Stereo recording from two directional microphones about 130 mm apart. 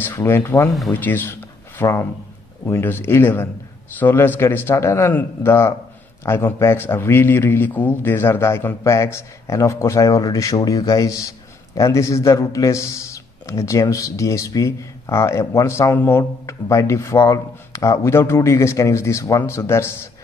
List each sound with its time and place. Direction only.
0.0 s a man's voice: 15° left (ahead or behind)